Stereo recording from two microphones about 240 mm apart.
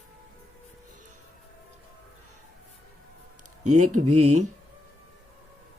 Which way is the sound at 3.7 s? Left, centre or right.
Right.